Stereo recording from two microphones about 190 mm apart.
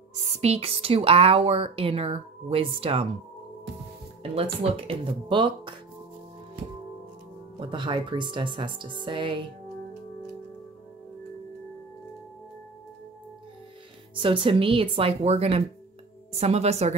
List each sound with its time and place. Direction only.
0.3 s speech: 35° right (ahead or behind)
4.2 s speech: 30° right (ahead or behind)
7.6 s speech: 25° right (ahead or behind)
14.1 s speech: 25° right (ahead or behind)